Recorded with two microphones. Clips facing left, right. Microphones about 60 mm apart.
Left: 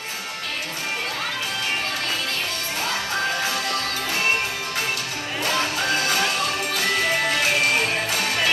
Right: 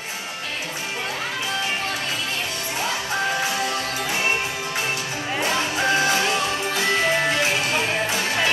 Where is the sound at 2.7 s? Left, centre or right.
Right.